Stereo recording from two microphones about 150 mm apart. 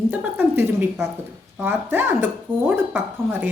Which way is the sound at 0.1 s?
10° right (ahead or behind).